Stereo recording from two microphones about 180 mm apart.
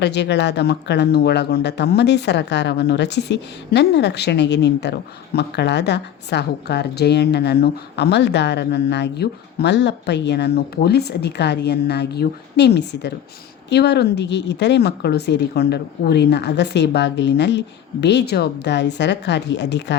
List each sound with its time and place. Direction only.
0.0 s speech: 70° left (ahead or behind)